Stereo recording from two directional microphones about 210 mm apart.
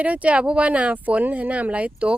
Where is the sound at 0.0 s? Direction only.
5° right (ahead or behind).